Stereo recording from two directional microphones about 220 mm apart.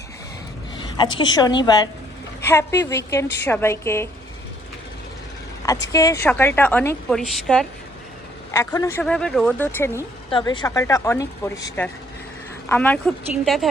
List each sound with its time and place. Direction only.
0.9 s a woman's voice: 20° left (ahead or behind)
5.9 s a woman's voice: 15° left (ahead or behind)
8.5 s a woman's voice: 15° left (ahead or behind)